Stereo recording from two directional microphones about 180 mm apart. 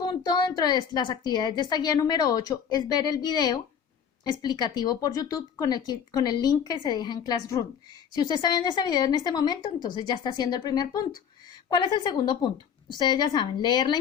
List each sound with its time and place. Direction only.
0.0 s a woman's voice: 20° left (ahead or behind)